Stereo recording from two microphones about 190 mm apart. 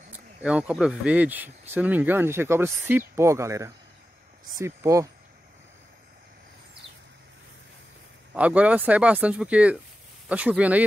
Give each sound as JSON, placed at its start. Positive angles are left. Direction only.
{"t": 0.1, "sound": "speech", "side_deg": -5}
{"t": 8.4, "sound": "speech", "side_deg": -5}